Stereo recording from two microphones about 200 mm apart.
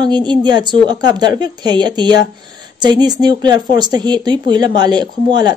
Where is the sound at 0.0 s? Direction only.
20° right (ahead or behind).